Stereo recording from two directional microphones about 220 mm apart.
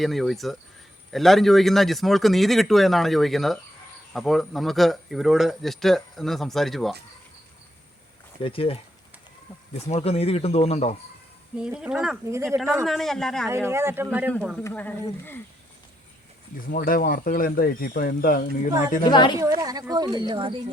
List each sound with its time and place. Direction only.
0.0 s a man's voice: centre (ahead or behind)
8.4 s speech: 25° left (ahead or behind)
11.5 s a man's voice: 5° right (ahead or behind)
12.8 s a man's voice: centre (ahead or behind)
13.7 s a man's voice: 10° right (ahead or behind); by 14.9 s 5° left (ahead or behind)
16.6 s speech: 40° left (ahead or behind)
19.0 s speech: 20° left (ahead or behind)
19.4 s speech: 15° right (ahead or behind)